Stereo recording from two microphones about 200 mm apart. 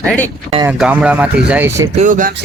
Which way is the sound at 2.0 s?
40° right (ahead or behind).